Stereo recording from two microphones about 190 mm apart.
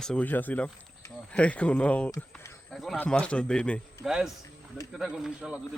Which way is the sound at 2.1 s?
15° left (ahead or behind).